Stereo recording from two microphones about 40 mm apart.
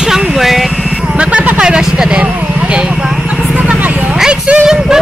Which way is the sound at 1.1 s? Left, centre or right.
Right.